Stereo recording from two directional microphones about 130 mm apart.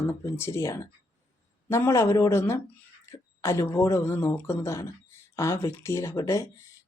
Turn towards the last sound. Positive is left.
turn(degrees=25)  # may be behind; listen again after turning